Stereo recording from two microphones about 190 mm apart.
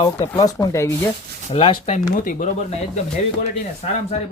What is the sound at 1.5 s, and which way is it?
Speech, 30° left (ahead or behind).